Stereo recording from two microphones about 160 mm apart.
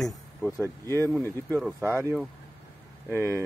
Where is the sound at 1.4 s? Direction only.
5° left (ahead or behind).